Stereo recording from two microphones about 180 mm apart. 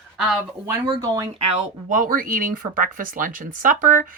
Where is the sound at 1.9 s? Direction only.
50° right (ahead or behind).